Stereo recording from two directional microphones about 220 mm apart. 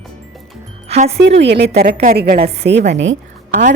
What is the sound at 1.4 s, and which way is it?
Speech, 50° right (ahead or behind).